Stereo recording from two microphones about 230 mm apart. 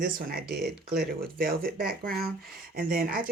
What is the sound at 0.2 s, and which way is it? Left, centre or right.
Speech, right.